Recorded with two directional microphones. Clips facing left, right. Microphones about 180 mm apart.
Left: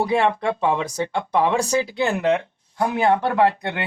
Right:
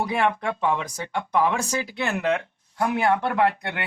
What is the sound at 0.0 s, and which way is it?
Speech, 30° left (ahead or behind).